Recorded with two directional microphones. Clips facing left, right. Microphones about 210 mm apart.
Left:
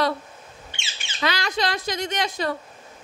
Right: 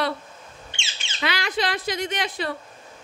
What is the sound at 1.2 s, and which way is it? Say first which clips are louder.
A woman's voice: left 1 dB; 40° left (ahead or behind).